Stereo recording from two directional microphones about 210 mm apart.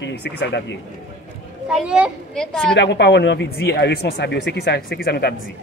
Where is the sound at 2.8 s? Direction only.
55° left (ahead or behind).